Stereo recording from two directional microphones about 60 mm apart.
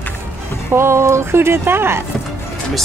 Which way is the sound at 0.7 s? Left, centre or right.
Right.